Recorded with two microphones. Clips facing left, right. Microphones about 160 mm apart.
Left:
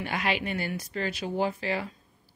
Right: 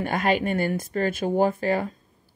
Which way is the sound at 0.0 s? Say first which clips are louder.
Right 7 dB; 50° right (ahead or behind).